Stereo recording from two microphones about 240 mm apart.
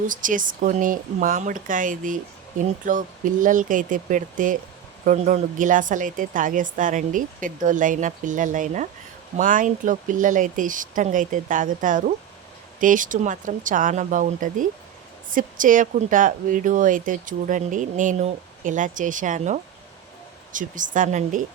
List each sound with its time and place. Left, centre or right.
0.1 s speech: right